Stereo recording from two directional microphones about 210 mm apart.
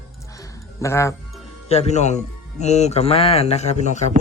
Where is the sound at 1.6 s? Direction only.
30° left (ahead or behind).